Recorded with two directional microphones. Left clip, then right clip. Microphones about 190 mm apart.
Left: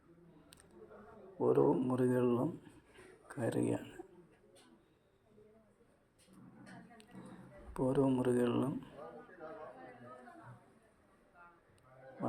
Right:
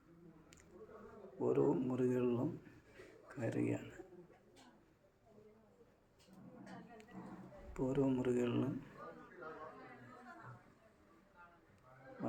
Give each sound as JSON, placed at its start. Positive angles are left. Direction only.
{"t": 1.4, "sound": "speech", "side_deg": 15}
{"t": 7.7, "sound": "speech", "side_deg": 10}